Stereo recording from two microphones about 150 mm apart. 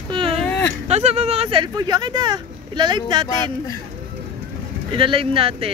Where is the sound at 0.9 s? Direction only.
45° right (ahead or behind); by 3.3 s 30° right (ahead or behind).